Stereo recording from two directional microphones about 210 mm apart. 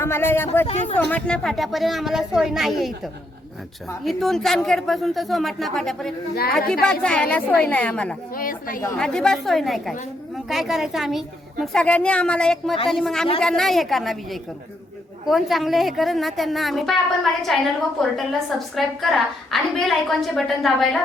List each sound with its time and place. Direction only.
0.0 s speech: 10° left (ahead or behind)
0.7 s speech: 30° left (ahead or behind)
1.1 s a woman's voice: 5° left (ahead or behind)
4.0 s a woman's voice: centre (ahead or behind)
8.4 s speech: 40° left (ahead or behind)
9.0 s a woman's voice: 5° left (ahead or behind)
15.3 s a woman's voice: centre (ahead or behind)